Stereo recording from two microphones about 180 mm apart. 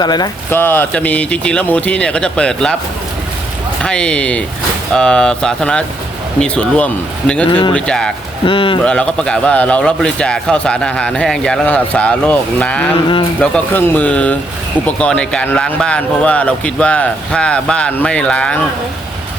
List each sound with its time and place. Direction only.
0.0 s speech: 20° left (ahead or behind); by 2.7 s 5° left (ahead or behind)
3.8 s speech: 5° left (ahead or behind)
8.4 s speech: 30° left (ahead or behind)
8.8 s speech: 5° left (ahead or behind)